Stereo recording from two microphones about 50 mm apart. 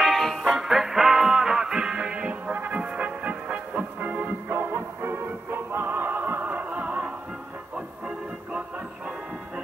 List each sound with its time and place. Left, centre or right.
0.0 s music: centre
0.5 s music: centre; by 4.6 s right
4.6 s music: right